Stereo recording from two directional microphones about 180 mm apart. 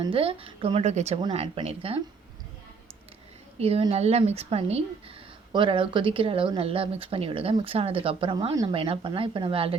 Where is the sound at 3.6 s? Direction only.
35° right (ahead or behind).